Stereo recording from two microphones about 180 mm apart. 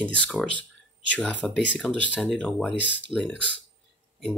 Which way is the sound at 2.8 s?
85° left.